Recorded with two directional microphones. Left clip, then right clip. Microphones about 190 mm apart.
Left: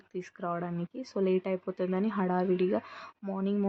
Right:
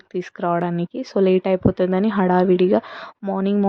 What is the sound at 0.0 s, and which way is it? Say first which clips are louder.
Speech: right 13 dB; 40° right (ahead or behind).